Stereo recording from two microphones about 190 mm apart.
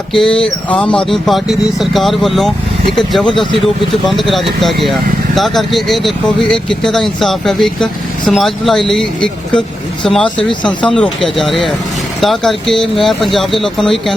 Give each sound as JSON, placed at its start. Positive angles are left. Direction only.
{"t": 0.1, "sound": "speech", "side_deg": 5}